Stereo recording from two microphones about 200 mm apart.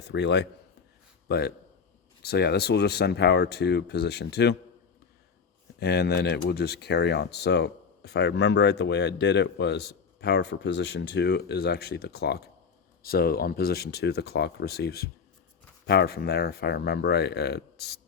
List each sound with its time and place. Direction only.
0.0 s speech: 60° left (ahead or behind)
5.8 s speech: 55° left (ahead or behind)